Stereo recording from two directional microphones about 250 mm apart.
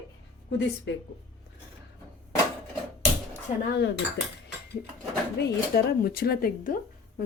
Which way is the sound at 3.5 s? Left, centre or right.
Left.